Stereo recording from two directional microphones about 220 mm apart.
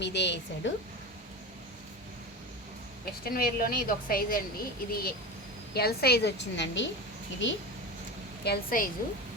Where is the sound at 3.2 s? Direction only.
45° left (ahead or behind).